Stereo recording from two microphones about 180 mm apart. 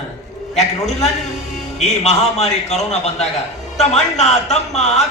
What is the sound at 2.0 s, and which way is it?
A man's voice, 35° left (ahead or behind).